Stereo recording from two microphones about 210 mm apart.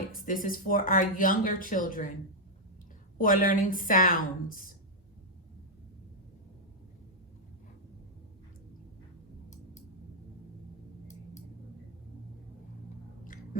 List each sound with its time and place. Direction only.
0.1 s speech: 40° left (ahead or behind)
3.2 s speech: 40° left (ahead or behind)
13.2 s a sound: 40° left (ahead or behind)